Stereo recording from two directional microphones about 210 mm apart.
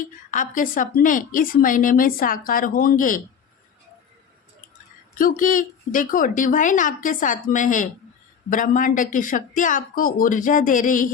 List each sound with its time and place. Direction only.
0.0 s a woman's voice: 40° left (ahead or behind)
5.1 s a woman's voice: 40° left (ahead or behind)